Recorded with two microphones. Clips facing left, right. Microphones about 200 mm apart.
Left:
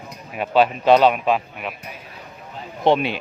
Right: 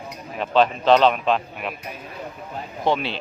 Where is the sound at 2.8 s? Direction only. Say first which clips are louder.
Left 5 dB; 25° left (ahead or behind).